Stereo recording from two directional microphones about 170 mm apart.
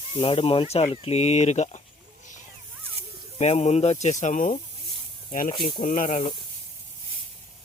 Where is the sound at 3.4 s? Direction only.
40° left (ahead or behind).